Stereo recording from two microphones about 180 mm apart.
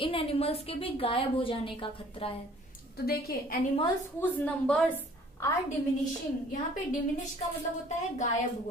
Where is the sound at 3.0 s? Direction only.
60° left (ahead or behind).